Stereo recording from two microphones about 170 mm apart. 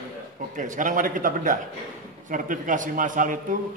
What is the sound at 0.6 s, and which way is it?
A man's voice, 50° right (ahead or behind).